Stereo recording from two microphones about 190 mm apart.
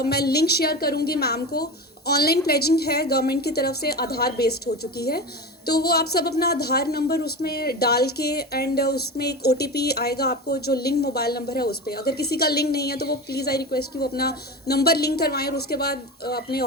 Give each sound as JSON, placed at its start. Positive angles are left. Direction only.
{"t": 0.0, "sound": "speech", "side_deg": 55}